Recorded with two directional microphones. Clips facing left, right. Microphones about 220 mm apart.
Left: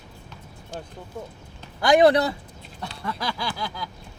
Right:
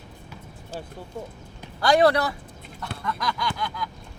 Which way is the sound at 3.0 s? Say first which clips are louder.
Right 1 dB; 30° left (ahead or behind).